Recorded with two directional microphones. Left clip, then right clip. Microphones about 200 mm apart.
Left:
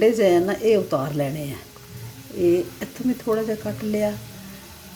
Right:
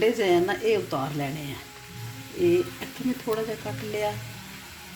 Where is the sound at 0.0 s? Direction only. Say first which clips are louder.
Left 5 dB; 35° left (ahead or behind).